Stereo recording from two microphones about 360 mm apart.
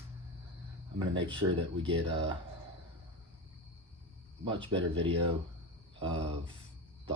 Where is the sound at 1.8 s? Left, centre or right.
Centre.